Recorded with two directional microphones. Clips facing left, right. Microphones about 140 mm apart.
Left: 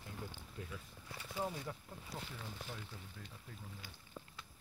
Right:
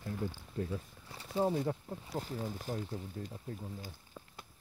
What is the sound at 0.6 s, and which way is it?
Speech, 35° right (ahead or behind).